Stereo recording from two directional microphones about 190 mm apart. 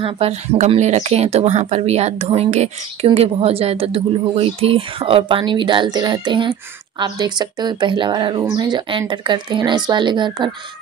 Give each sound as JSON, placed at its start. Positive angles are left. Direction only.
{"t": 0.0, "sound": "speech", "side_deg": -35}